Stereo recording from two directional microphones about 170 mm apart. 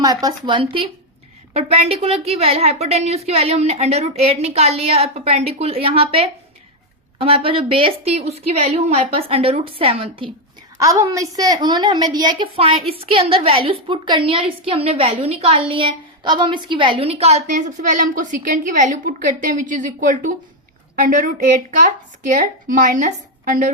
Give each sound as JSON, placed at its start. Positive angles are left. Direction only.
{"t": 0.0, "sound": "a woman's voice", "side_deg": -20}
{"t": 10.8, "sound": "a woman's voice", "side_deg": -20}